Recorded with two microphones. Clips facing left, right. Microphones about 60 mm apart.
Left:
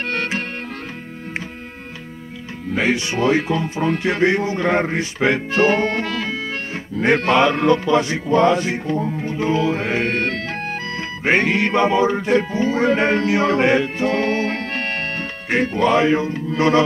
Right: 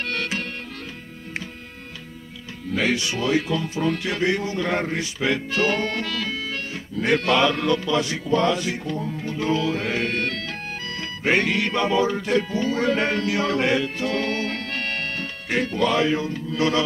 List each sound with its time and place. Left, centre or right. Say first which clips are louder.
0.0 s music: left 4 dB; left
2.7 s speech: left 3 dB; left